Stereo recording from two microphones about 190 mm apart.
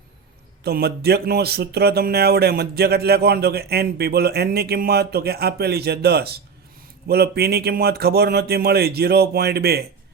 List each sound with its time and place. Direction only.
0.6 s speech: 55° right (ahead or behind)